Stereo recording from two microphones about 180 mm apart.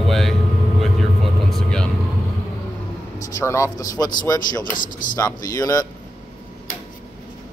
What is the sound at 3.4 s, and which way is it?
A man's voice, 15° left (ahead or behind).